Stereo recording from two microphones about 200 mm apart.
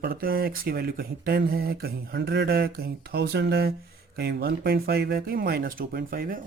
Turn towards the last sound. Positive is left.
turn(degrees=-50)  # may be behind; listen again after turning